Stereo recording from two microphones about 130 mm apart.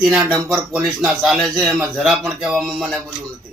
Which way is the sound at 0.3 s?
20° right (ahead or behind).